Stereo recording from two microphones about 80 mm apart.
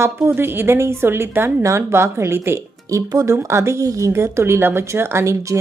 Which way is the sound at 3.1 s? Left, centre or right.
Right.